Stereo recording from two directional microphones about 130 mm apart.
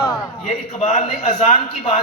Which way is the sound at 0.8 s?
60° left (ahead or behind).